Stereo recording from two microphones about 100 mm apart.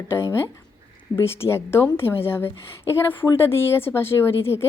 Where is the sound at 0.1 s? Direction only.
25° left (ahead or behind).